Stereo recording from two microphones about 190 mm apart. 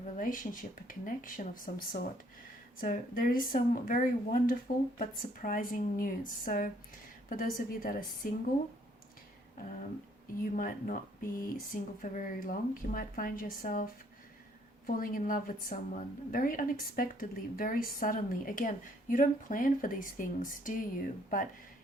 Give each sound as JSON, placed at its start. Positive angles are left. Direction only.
{"t": 0.2, "sound": "a woman's voice", "side_deg": 45}
{"t": 10.6, "sound": "a woman's voice", "side_deg": 45}